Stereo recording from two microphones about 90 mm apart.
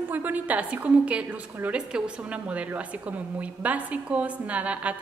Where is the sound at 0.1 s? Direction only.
20° right (ahead or behind).